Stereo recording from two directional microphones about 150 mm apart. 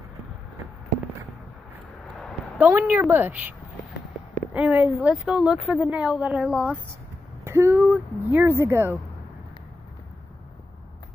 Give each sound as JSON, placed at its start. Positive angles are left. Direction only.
{"t": 2.6, "sound": "speech", "side_deg": -10}
{"t": 4.6, "sound": "speech", "side_deg": -10}
{"t": 7.4, "sound": "speech", "side_deg": -15}